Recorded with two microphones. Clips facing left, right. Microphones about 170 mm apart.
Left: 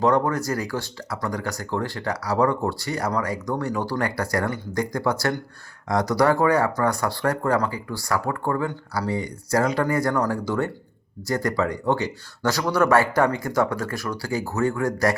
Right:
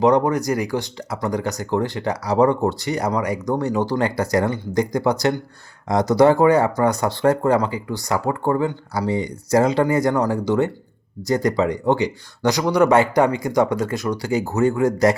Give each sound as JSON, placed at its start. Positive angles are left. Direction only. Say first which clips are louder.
{"t": 0.0, "sound": "speech", "louder": "right 4 dB", "side_deg": -20}